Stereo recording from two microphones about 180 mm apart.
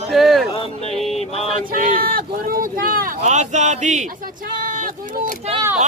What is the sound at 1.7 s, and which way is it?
Speech, 50° right (ahead or behind).